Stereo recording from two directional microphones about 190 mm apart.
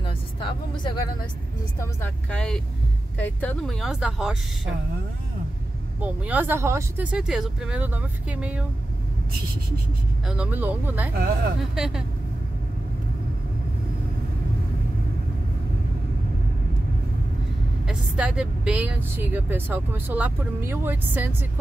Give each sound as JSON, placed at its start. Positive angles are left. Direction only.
{"t": 0.0, "sound": "vehicle", "side_deg": 25}
{"t": 1.8, "sound": "speech", "side_deg": 10}
{"t": 5.9, "sound": "a woman's voice", "side_deg": -10}
{"t": 10.2, "sound": "a woman's voice", "side_deg": -5}
{"t": 11.1, "sound": "speech", "side_deg": -55}
{"t": 11.7, "sound": "speech", "side_deg": -5}
{"t": 17.8, "sound": "a woman's voice", "side_deg": -5}